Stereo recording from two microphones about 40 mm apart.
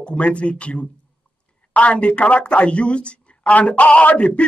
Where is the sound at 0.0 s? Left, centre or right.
Left.